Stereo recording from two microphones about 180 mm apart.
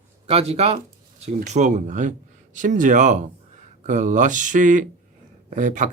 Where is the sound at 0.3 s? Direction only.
35° right (ahead or behind).